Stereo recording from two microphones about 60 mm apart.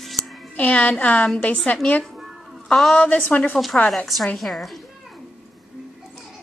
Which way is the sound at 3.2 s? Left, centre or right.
Left.